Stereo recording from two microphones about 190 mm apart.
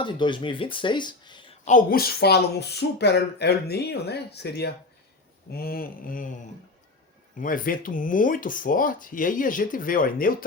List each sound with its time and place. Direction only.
0.0 s speech: 25° left (ahead or behind)
1.6 s speech: 45° left (ahead or behind)
7.3 s speech: 45° left (ahead or behind)